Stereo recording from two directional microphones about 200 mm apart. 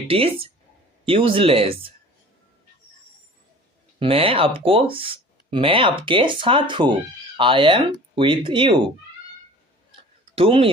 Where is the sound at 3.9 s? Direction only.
30° right (ahead or behind).